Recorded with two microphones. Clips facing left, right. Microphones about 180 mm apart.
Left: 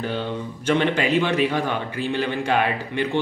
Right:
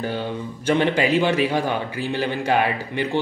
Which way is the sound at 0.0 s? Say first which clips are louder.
Even; 10° right (ahead or behind).